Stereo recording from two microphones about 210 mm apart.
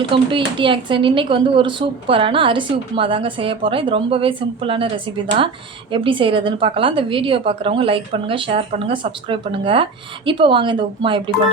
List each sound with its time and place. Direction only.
0.1 s speech: 25° right (ahead or behind)